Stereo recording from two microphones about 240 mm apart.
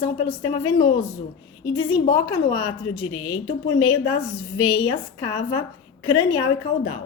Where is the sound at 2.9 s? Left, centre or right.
Left.